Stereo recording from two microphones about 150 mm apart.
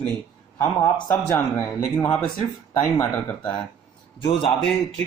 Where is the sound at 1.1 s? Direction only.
25° left (ahead or behind).